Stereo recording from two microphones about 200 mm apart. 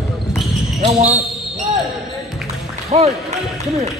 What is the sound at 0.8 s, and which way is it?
Speech, 35° right (ahead or behind).